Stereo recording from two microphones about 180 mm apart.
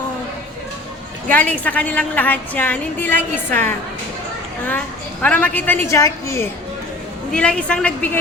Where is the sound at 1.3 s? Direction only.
10° left (ahead or behind).